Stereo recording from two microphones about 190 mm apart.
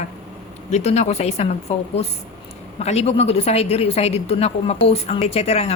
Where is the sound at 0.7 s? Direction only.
35° left (ahead or behind).